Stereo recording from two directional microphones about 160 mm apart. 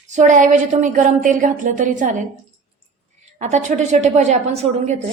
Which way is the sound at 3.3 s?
45° right (ahead or behind).